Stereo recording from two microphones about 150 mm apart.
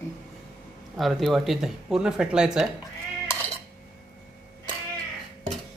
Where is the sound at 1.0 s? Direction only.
Centre (ahead or behind).